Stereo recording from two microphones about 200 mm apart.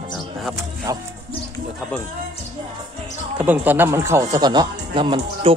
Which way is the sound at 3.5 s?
10° right (ahead or behind).